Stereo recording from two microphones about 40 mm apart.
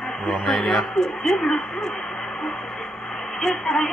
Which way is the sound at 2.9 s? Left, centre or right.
Centre.